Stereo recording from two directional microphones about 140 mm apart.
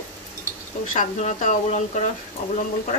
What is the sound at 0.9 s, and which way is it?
Speech, 60° left (ahead or behind).